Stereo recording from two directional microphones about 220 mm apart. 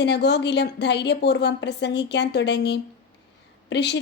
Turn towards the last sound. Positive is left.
turn(degrees=50)  # may be behind; listen again after turning